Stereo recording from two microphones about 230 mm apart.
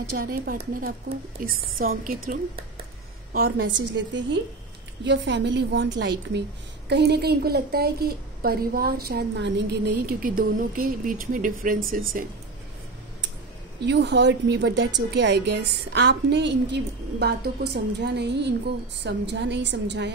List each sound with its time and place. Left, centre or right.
0.1 s speech: right
3.3 s a woman's voice: right
13.8 s a woman's voice: right